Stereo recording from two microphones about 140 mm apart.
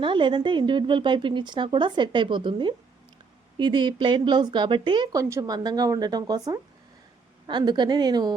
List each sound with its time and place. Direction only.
0.0 s speech: 35° right (ahead or behind)